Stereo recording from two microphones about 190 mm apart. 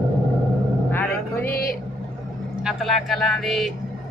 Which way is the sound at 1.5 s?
50° left (ahead or behind).